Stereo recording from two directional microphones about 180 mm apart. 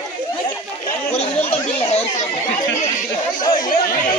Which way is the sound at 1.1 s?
35° left (ahead or behind).